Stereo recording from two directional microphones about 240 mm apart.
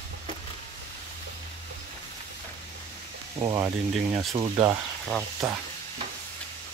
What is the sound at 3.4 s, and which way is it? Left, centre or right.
Speech, centre.